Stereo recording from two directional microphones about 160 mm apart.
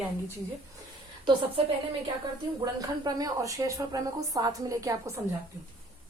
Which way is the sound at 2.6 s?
25° right (ahead or behind).